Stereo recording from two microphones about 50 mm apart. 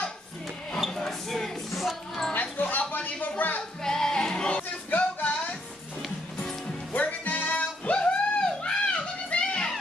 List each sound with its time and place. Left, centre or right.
0.8 s a sound: centre
1.7 s music: centre
2.5 s a sound: left
3.8 s music: centre
4.6 s music: left
6.9 s music: left